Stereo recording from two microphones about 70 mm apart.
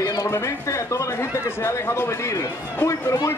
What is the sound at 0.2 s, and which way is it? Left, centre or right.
Speech, left.